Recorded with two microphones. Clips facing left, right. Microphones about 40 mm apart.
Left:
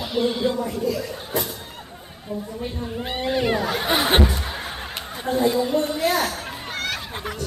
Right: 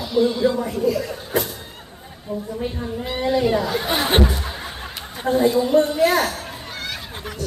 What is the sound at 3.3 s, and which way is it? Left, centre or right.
Speech, left.